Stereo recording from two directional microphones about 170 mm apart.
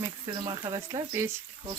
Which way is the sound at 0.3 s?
15° right (ahead or behind).